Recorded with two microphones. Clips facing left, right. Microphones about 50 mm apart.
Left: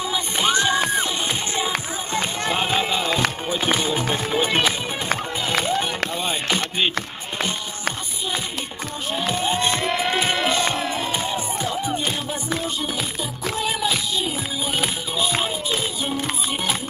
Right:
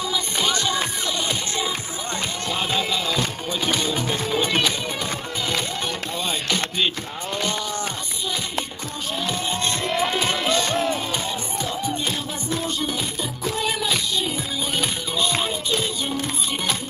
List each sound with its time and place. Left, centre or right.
0.1 s music: left
2.1 s music: left
9.1 s music: left
13.6 s music: centre